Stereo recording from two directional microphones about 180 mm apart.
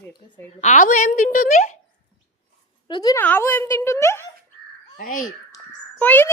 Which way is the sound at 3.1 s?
10° left (ahead or behind).